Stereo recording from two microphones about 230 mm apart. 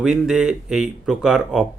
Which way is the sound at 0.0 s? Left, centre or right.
Centre.